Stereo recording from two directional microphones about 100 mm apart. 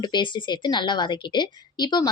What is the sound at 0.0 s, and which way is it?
A woman's voice, 50° left (ahead or behind).